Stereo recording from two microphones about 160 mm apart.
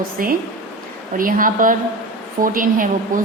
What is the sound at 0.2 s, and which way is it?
Speech, 60° right (ahead or behind).